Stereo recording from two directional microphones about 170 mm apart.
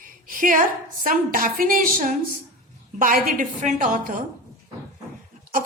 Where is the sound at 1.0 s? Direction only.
55° right (ahead or behind).